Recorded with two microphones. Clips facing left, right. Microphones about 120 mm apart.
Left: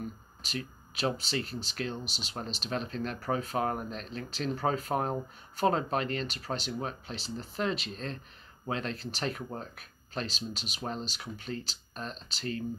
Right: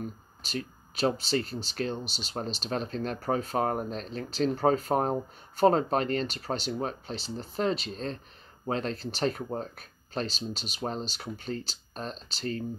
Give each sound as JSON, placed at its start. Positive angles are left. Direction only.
{"t": 0.4, "sound": "speech", "side_deg": -40}